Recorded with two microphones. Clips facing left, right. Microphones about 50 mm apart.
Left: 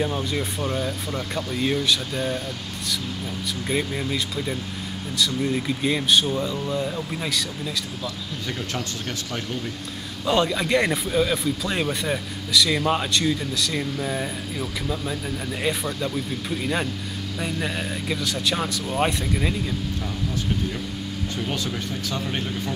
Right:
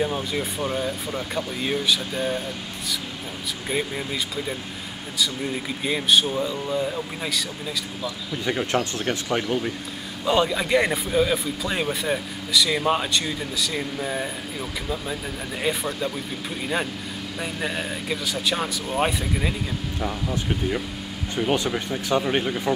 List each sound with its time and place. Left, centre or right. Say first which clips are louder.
0.0 s speech: even; centre
3.7 s speech: left 1 dB; centre
8.5 s speech: right 7 dB; right
10.2 s speech: even; centre
15.6 s speech: right 1 dB; centre
20.0 s speech: right 2 dB; right